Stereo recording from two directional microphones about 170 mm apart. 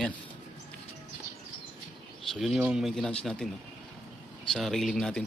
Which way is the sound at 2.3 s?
Centre (ahead or behind).